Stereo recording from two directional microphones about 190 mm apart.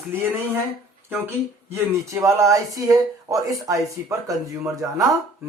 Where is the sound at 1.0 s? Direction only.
10° right (ahead or behind).